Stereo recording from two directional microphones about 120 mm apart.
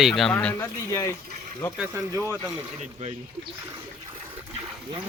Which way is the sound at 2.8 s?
60° right (ahead or behind).